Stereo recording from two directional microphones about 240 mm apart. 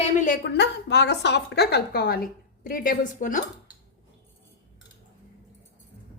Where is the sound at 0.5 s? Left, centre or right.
Left.